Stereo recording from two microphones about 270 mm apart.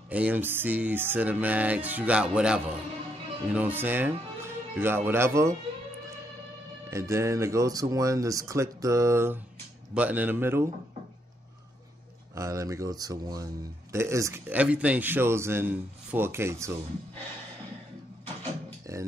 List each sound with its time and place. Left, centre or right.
0.1 s music: centre
3.4 s speech: centre
6.9 s a man's voice: centre
12.4 s a man's voice: centre
18.2 s a sound: centre